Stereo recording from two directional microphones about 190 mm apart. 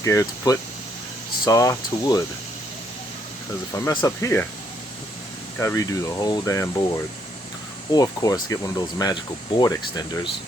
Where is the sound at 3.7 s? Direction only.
15° left (ahead or behind).